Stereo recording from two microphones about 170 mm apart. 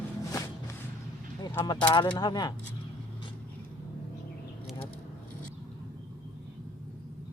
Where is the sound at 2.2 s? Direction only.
25° left (ahead or behind).